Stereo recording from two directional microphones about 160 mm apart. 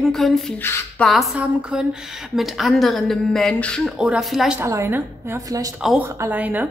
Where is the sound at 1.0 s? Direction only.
Centre (ahead or behind).